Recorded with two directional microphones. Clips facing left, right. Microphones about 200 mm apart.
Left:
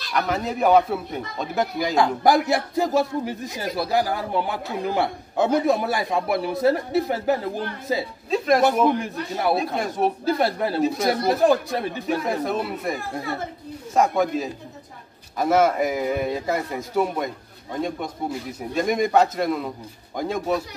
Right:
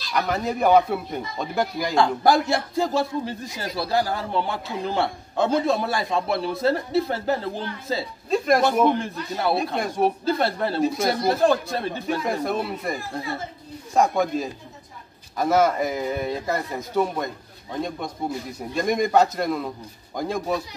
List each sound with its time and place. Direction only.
0.1 s a man's voice: centre (ahead or behind)
2.0 s a man's voice: 15° left (ahead or behind)
8.3 s a man's voice: centre (ahead or behind)
8.9 s a man's voice: 15° left (ahead or behind)
9.8 s a man's voice: centre (ahead or behind)
18.6 s a man's voice: 5° left (ahead or behind)